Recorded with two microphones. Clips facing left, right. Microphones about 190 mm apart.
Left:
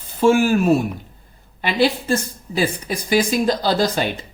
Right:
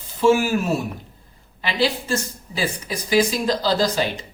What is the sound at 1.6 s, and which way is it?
Speech, 55° left (ahead or behind).